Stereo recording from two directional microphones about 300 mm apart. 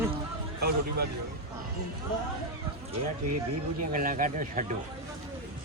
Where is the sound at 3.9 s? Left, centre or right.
Right.